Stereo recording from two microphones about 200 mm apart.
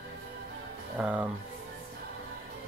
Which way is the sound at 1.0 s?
5° right (ahead or behind).